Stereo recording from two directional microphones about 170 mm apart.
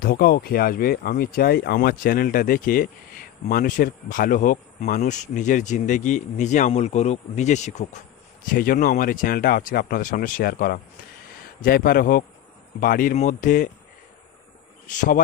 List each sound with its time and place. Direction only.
0.0 s speech: 60° left (ahead or behind); by 8.0 s 45° left (ahead or behind)
8.5 s speech: 55° left (ahead or behind)
14.8 s speech: 50° left (ahead or behind)